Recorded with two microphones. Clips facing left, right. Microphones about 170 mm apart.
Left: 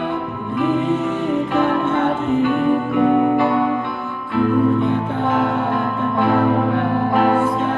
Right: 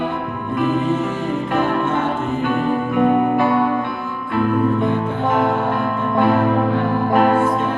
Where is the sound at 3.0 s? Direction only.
50° right (ahead or behind).